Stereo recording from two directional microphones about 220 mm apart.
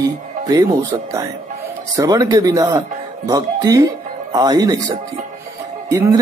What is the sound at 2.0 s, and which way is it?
Speech, 15° right (ahead or behind).